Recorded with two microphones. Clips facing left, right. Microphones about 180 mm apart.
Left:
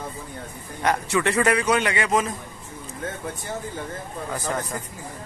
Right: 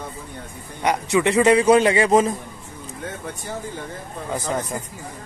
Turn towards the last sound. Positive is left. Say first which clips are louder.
# right 3 dB
turn(degrees=-20)  # may be behind; listen again after turning